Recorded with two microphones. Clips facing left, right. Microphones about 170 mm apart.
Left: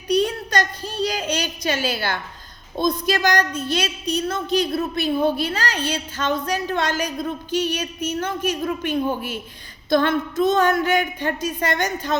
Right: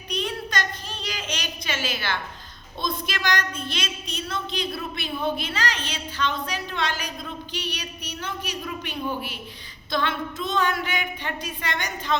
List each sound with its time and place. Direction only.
0.1 s a child's voice: 40° left (ahead or behind)